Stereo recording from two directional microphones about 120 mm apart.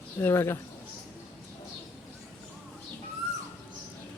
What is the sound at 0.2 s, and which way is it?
Speech, 20° left (ahead or behind).